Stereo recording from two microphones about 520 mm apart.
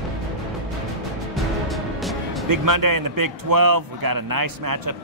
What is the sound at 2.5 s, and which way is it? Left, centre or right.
Speech, right.